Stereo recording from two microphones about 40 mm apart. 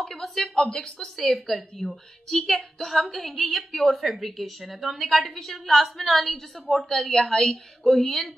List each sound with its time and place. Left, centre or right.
0.0 s a woman's voice: centre